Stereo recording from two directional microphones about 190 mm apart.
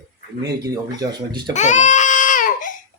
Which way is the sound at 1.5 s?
40° left (ahead or behind).